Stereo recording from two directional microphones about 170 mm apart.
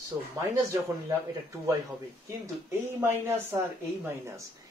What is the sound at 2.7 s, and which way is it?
Speech, 15° right (ahead or behind).